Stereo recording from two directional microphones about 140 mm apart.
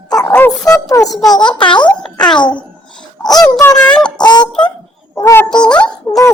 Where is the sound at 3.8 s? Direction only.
5° left (ahead or behind).